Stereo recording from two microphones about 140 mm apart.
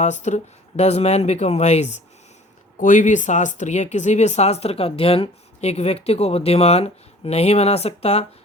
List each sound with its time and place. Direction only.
0.0 s speech: 55° left (ahead or behind)
2.7 s speech: 65° left (ahead or behind); by 8.3 s 45° left (ahead or behind)